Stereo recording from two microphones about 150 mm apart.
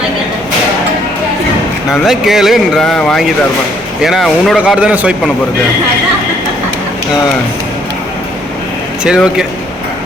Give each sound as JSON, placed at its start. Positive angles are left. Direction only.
{"t": 1.9, "sound": "speech", "side_deg": 0}
{"t": 9.0, "sound": "speech", "side_deg": -5}